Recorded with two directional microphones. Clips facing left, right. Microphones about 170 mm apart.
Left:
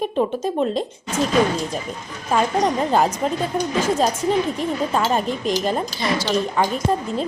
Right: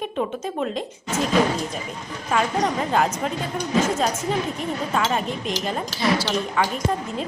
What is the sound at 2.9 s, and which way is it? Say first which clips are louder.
Speech: left 3 dB; 30° left (ahead or behind).